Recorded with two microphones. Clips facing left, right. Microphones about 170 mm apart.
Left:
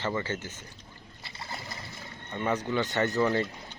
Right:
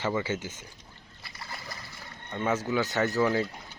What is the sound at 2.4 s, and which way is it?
Speech, 5° right (ahead or behind).